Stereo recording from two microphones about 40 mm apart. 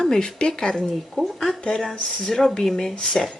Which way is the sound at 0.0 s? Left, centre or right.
Centre.